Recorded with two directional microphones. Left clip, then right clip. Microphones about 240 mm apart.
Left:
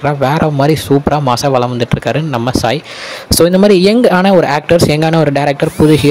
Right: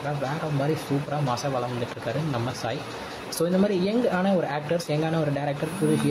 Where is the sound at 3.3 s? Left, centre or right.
Left.